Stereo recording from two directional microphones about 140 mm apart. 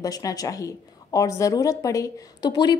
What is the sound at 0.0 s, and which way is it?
A woman's voice, 25° left (ahead or behind).